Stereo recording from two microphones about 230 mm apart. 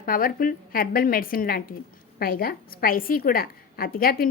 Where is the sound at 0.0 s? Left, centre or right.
Left.